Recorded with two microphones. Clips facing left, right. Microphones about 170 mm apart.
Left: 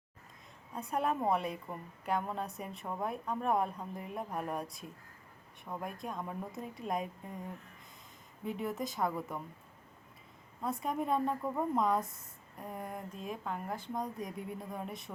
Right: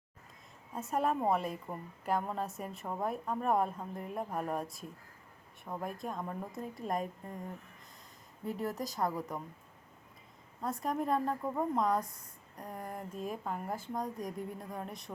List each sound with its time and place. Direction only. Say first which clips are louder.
0.7 s a woman's voice: right 1 dB; centre (ahead or behind)
5.8 s a woman's voice: right 2 dB; centre (ahead or behind)
8.6 s a woman's voice: even; centre (ahead or behind)
10.6 s a woman's voice: right 1 dB; centre (ahead or behind)